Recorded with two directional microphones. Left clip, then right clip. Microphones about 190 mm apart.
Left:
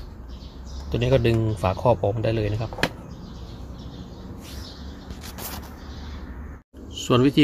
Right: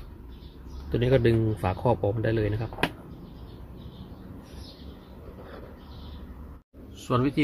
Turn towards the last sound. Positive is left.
turn(degrees=15)  # may be behind; listen again after turning